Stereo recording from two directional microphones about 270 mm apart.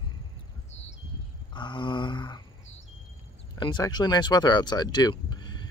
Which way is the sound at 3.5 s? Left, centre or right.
Centre.